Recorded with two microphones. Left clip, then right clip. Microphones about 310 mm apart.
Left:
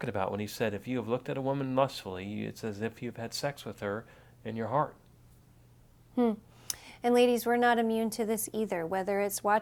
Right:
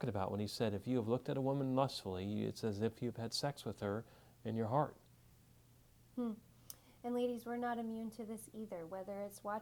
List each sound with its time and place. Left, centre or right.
0.0 s speech: right
6.1 s a woman's voice: left